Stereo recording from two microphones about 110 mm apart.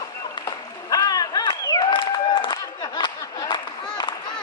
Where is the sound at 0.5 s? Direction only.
35° left (ahead or behind).